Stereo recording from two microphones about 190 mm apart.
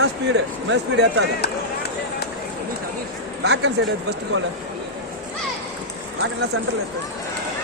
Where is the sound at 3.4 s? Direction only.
65° right (ahead or behind).